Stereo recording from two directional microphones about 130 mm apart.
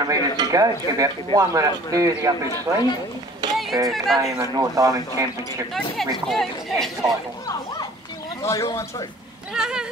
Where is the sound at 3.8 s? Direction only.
Centre (ahead or behind).